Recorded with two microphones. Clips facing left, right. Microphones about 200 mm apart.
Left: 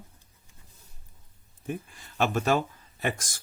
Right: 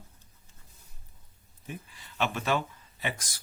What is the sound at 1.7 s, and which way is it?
Speech, 45° left (ahead or behind).